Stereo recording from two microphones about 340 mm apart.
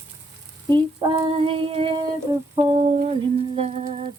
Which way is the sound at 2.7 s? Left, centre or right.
Centre.